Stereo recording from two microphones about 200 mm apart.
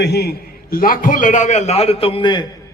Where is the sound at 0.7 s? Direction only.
45° left (ahead or behind).